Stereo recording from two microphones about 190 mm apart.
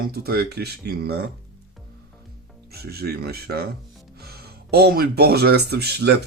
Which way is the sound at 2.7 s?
55° right (ahead or behind).